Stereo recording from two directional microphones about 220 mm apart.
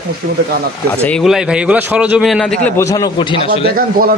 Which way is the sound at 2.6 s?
15° left (ahead or behind).